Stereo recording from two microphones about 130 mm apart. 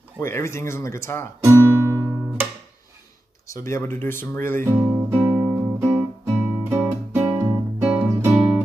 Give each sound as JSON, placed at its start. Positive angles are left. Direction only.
{"t": 0.2, "sound": "speech", "side_deg": 20}
{"t": 1.4, "sound": "guitar", "side_deg": -20}
{"t": 3.4, "sound": "speech", "side_deg": 25}
{"t": 5.1, "sound": "music", "side_deg": -10}